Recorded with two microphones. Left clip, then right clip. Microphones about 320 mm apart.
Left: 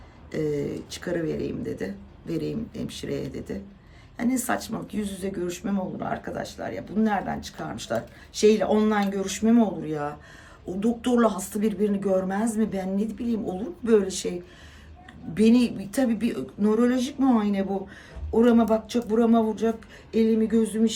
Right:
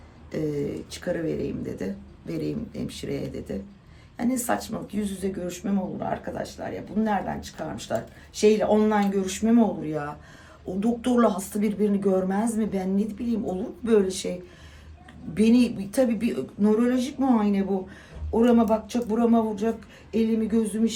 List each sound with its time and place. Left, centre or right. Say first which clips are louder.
0.3 s a woman's voice: left 1 dB; centre
15.4 s a woman's voice: even; centre